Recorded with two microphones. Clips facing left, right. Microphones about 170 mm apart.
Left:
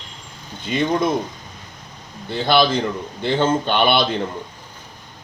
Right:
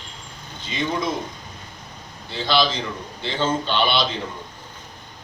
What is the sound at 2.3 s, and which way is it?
A man's voice, 55° left (ahead or behind).